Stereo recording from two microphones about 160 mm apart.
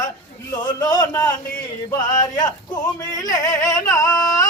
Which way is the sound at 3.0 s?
20° left (ahead or behind).